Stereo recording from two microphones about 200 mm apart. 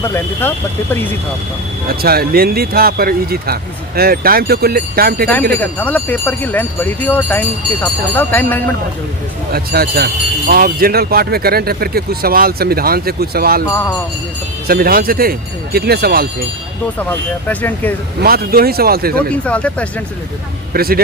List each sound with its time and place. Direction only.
0.0 s speech: 10° left (ahead or behind)
1.9 s speech: 50° right (ahead or behind)
5.8 s speech: 10° left (ahead or behind)
9.5 s speech: 50° right (ahead or behind)
14.7 s speech: 45° right (ahead or behind)
17.0 s speech: 10° left (ahead or behind)
18.2 s speech: 50° right (ahead or behind)
19.3 s speech: 5° left (ahead or behind)
20.7 s speech: 50° right (ahead or behind)